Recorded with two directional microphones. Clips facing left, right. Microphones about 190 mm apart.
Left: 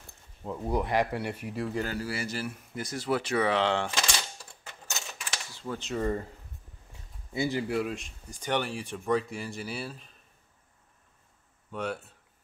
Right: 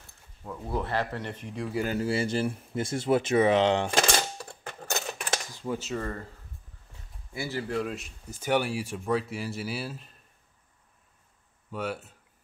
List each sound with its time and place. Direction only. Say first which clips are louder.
0.4 s speech: left 3 dB; 20° left (ahead or behind)
1.7 s speech: right 5 dB; 10° right (ahead or behind)
2.0 s speech: right 6 dB; 25° right (ahead or behind)
3.9 s coin: right 7 dB; 55° right (ahead or behind)
5.6 s speech: right 1 dB; 15° right (ahead or behind)
5.9 s speech: left 4 dB; 20° left (ahead or behind)
7.3 s speech: left 2 dB; 15° left (ahead or behind)
7.9 s speech: even; 5° right (ahead or behind)
11.7 s speech: right 1 dB; 5° right (ahead or behind)